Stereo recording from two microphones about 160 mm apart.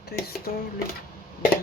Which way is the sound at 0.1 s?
75° left (ahead or behind).